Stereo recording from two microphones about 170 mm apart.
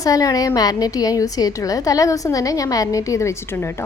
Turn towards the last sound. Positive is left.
turn(degrees=15)  # may be behind; listen again after turning